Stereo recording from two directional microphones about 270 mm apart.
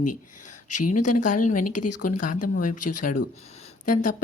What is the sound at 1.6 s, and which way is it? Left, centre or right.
Speech, left.